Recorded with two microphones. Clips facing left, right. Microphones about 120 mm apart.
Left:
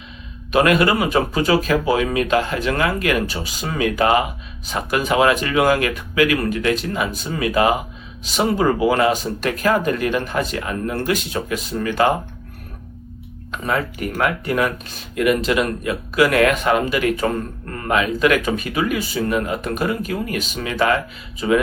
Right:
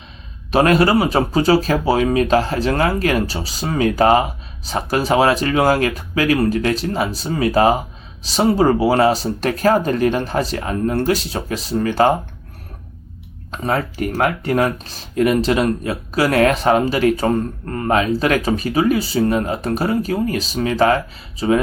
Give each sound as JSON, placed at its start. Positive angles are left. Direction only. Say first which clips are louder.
{"t": 0.5, "sound": "speech", "louder": "right 2 dB", "side_deg": -35}
{"t": 13.5, "sound": "speech", "louder": "right 2 dB", "side_deg": -35}